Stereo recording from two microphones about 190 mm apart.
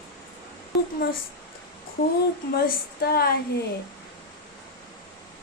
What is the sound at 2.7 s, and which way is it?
Speech, 55° left (ahead or behind).